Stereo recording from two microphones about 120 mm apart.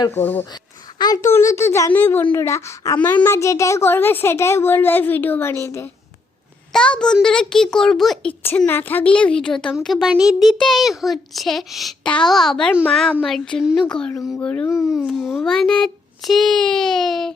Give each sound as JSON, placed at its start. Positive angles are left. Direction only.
{"t": 0.1, "sound": "a woman's voice", "side_deg": 15}
{"t": 0.5, "sound": "a sound", "side_deg": 35}
{"t": 1.3, "sound": "a child's voice", "side_deg": 20}
{"t": 3.0, "sound": "a child's voice", "side_deg": 15}
{"t": 6.7, "sound": "a child's voice", "side_deg": 5}
{"t": 8.3, "sound": "a woman's voice", "side_deg": 15}
{"t": 15.0, "sound": "a child's voice", "side_deg": 0}